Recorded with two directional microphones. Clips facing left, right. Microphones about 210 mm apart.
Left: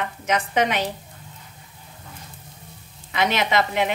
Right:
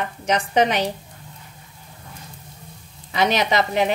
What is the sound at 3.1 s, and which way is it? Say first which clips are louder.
Speech: right 2 dB; 35° right (ahead or behind).